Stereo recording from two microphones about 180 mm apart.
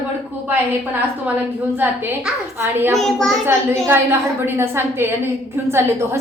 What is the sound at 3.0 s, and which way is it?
Speech, centre (ahead or behind).